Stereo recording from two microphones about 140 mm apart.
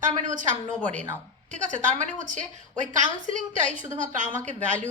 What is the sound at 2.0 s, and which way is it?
A woman's voice, 65° right (ahead or behind).